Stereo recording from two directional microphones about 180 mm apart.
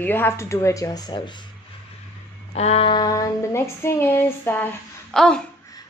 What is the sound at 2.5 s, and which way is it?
Speech, 35° left (ahead or behind).